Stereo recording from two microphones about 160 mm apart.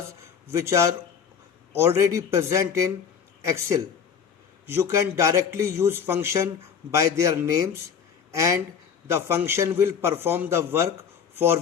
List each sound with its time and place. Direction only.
0.5 s a man's voice: 15° right (ahead or behind)